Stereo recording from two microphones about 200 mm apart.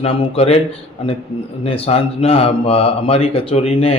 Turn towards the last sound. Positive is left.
turn(degrees=30)  # may be behind; listen again after turning